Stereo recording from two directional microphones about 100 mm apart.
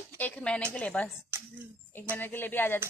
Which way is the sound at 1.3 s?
25° right (ahead or behind).